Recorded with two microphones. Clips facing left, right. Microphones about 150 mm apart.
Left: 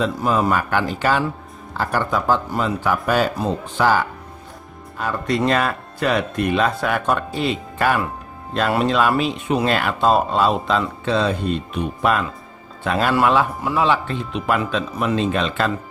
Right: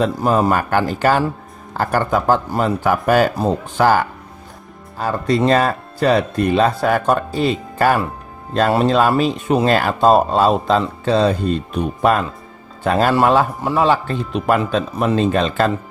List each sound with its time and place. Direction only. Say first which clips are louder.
0.0 s a man's voice: right 3 dB; 40° right (ahead or behind)
4.9 s speech: right 4 dB; 35° right (ahead or behind)